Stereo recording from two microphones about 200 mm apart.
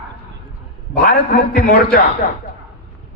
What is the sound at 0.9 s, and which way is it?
A man's voice, 50° left (ahead or behind).